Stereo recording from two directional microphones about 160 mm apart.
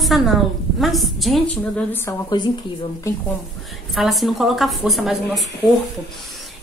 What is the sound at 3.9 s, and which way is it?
A woman's voice, centre (ahead or behind).